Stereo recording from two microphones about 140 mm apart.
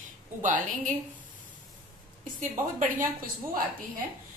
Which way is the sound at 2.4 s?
70° right (ahead or behind).